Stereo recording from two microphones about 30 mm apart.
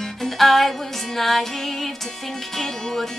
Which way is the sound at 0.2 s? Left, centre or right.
Centre.